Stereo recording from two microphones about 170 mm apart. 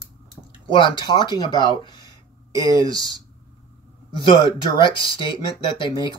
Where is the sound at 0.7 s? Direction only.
30° left (ahead or behind).